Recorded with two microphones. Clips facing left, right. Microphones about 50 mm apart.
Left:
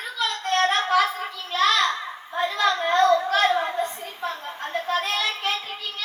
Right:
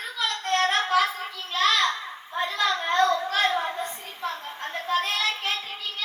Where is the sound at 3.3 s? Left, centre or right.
Centre.